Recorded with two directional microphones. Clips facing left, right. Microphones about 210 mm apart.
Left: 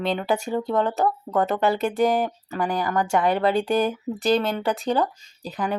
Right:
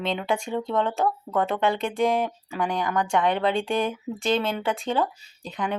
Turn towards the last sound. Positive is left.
turn(degrees=5)  # may be behind; listen again after turning